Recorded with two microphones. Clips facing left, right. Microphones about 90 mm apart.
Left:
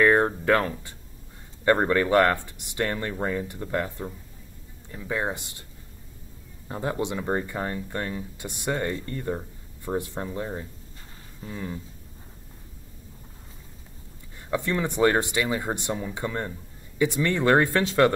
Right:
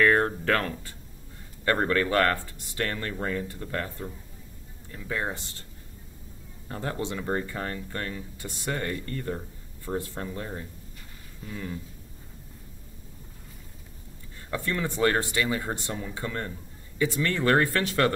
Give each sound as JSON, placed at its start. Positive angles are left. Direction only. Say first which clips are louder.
{"t": 0.0, "sound": "speech", "louder": "left 2 dB", "side_deg": 20}
{"t": 6.7, "sound": "speech", "louder": "left 3 dB", "side_deg": 15}
{"t": 14.5, "sound": "speech", "louder": "left 3 dB", "side_deg": 20}